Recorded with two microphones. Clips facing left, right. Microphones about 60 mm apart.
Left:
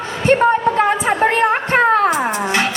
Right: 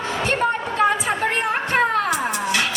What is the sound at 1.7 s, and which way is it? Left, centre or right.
Music, left.